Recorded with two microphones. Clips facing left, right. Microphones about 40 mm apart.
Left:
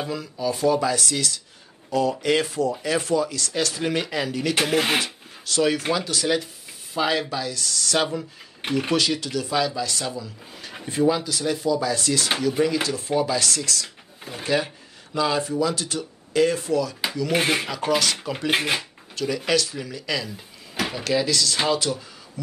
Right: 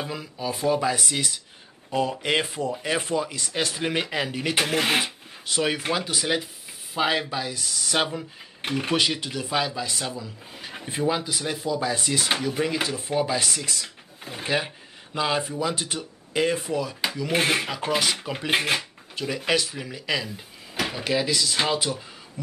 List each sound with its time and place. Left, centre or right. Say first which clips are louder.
0.1 s speech: left 4 dB; centre
4.6 s speech: left 1 dB; centre
5.0 s speech: even; centre
8.2 s speech: left 1 dB; centre
8.9 s speech: even; right; by 10.9 s centre
10.9 s speech: left 4 dB; centre
17.3 s speech: left 1 dB; centre
17.6 s speech: left 2 dB; centre
18.5 s speech: even; centre
19.1 s speech: left 2 dB; centre